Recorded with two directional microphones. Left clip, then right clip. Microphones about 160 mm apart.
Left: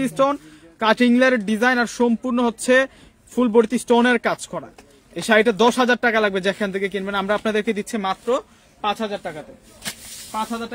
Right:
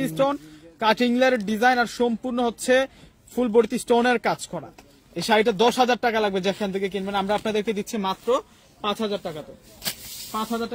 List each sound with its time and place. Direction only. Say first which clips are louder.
0.0 s a man's voice: left 4 dB; 40° left (ahead or behind)
10.3 s speech: left 2 dB; 30° left (ahead or behind)